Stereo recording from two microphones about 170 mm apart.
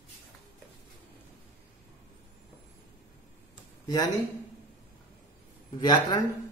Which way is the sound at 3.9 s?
20° left (ahead or behind).